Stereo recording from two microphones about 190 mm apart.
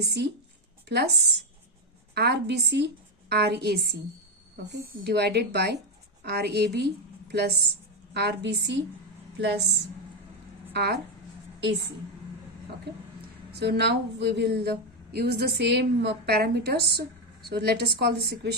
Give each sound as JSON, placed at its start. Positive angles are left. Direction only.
{"t": 0.0, "sound": "a woman's voice", "side_deg": -60}
{"t": 10.8, "sound": "a woman's voice", "side_deg": -60}
{"t": 13.5, "sound": "a woman's voice", "side_deg": -60}